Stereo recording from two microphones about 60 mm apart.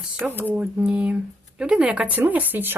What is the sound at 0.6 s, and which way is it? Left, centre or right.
Speech, centre.